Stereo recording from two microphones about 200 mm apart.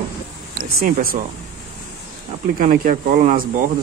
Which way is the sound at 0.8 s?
45° right (ahead or behind).